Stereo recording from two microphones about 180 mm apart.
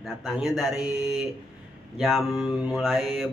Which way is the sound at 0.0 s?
Centre (ahead or behind).